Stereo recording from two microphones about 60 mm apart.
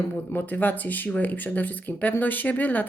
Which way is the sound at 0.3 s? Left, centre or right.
Left.